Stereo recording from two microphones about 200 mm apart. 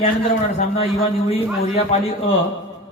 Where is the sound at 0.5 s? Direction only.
30° left (ahead or behind).